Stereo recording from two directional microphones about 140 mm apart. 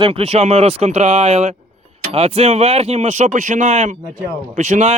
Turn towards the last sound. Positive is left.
turn(degrees=-55)  # may be behind; listen again after turning